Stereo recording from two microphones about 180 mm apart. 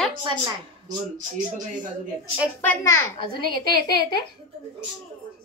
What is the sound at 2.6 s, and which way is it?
Speech, 10° left (ahead or behind).